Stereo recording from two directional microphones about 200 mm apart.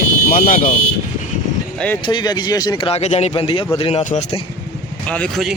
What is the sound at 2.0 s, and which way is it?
Speech, 20° left (ahead or behind).